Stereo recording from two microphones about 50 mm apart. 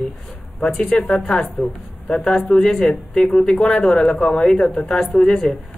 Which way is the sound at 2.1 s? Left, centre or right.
Centre.